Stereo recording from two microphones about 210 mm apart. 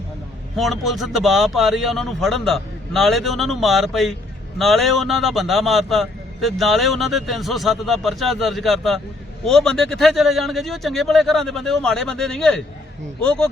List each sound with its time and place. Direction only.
0.5 s a man's voice: centre (ahead or behind)